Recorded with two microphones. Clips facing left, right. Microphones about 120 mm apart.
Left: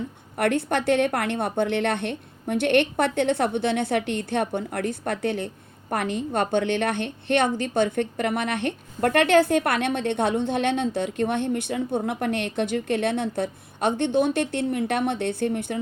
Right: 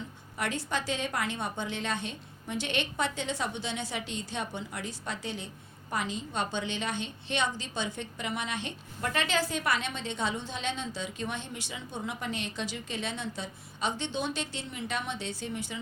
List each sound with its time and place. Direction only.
0.3 s a woman's voice: 60° left (ahead or behind)